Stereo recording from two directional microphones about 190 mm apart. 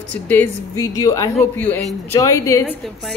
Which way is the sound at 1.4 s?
10° left (ahead or behind).